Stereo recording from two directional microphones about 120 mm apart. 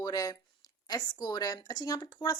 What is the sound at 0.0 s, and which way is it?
A woman's voice, 30° left (ahead or behind).